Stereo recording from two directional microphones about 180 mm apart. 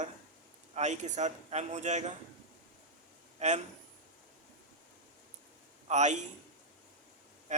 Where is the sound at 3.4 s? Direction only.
40° right (ahead or behind).